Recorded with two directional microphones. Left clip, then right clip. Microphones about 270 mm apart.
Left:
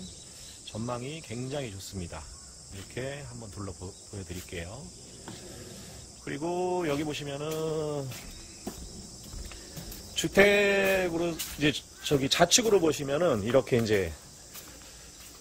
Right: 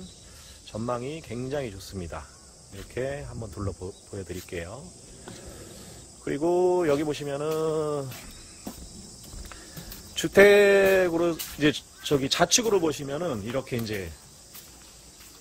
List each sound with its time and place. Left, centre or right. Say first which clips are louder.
0.7 s mantra: right 5 dB; centre
5.2 s a sound: right 1 dB; centre
6.2 s mantra: right 8 dB; right
10.1 s speech: right 5 dB; centre